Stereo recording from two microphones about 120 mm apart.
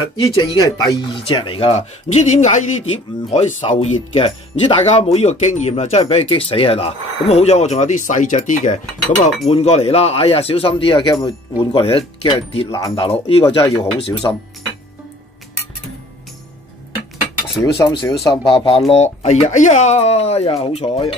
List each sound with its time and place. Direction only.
0.2 s speech: 30° left (ahead or behind)
1.2 s speech: 45° left (ahead or behind)
1.7 s speech: 70° left (ahead or behind)
2.9 s speech: 55° left (ahead or behind)
4.1 s speech: 45° left (ahead or behind)
4.9 s speech: 65° left (ahead or behind); by 9.3 s 85° left
9.5 s speech: 60° left (ahead or behind); by 12.6 s 45° left (ahead or behind)
12.6 s speech: 30° left (ahead or behind)
13.0 s speech: 55° left (ahead or behind)
13.6 s speech: 35° left (ahead or behind)
17.6 s speech: 25° left (ahead or behind)
18.3 s speech: 50° left (ahead or behind)
18.9 s speech: 65° left (ahead or behind)